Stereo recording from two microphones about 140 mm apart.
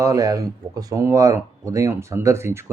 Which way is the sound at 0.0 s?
25° right (ahead or behind).